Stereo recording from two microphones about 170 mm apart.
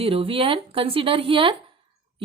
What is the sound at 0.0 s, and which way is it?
Speech, 35° right (ahead or behind).